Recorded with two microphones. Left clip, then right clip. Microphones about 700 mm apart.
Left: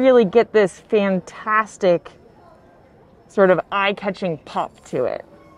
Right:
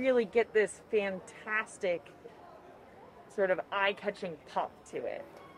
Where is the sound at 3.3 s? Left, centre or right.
Left.